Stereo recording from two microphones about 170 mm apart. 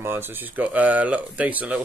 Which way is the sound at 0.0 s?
15° right (ahead or behind).